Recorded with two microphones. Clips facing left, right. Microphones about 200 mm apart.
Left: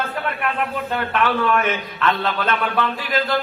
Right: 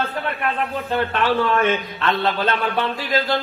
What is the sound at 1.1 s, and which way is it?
A man's voice, 30° right (ahead or behind).